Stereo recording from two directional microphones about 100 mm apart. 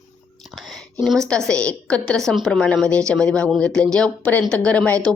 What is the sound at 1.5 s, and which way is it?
Speech, 10° left (ahead or behind).